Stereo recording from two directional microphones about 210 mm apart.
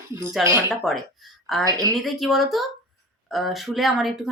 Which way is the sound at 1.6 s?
15° right (ahead or behind).